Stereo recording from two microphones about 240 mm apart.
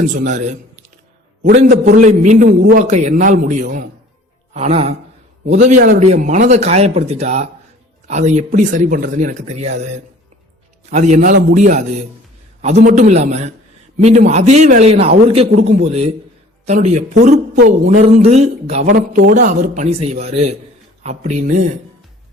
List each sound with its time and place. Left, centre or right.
0.1 s a man's voice: right
10.9 s a man's voice: right